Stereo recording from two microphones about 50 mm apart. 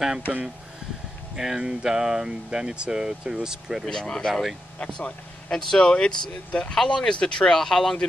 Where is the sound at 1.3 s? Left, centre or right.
Centre.